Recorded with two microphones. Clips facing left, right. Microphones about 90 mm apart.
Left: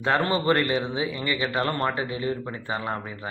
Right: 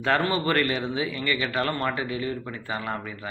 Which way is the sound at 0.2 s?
30° left (ahead or behind).